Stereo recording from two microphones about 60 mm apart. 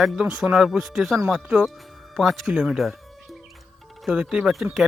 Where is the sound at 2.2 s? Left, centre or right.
Centre.